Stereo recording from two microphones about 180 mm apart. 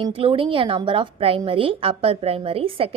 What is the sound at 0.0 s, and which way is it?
A woman's voice, 30° right (ahead or behind).